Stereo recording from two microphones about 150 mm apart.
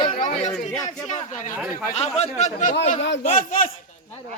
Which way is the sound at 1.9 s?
45° left (ahead or behind).